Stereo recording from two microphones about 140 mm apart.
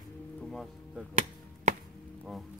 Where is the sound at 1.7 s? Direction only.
60° right (ahead or behind).